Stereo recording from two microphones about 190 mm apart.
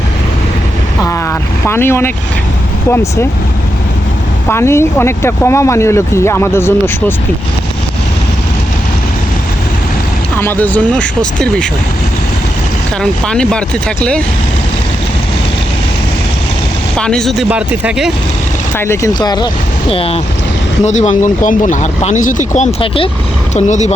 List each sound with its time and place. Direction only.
1.0 s vehicle: 15° left (ahead or behind)
2.9 s speech: 15° left (ahead or behind)
4.4 s speech: 15° left (ahead or behind)
10.4 s speech: 10° left (ahead or behind)
13.0 s speech: 5° left (ahead or behind)
17.0 s speech: 5° left (ahead or behind)
18.8 s speech: 15° left (ahead or behind); by 23.9 s 40° left (ahead or behind)